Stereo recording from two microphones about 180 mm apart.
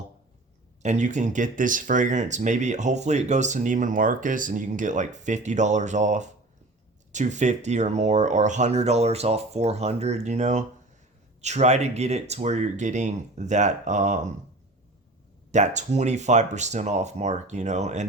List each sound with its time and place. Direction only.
0.8 s speech: 40° right (ahead or behind)
15.5 s speech: 40° right (ahead or behind)